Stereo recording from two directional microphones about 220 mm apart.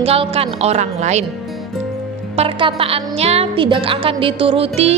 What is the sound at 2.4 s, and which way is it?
A woman's voice, 25° right (ahead or behind).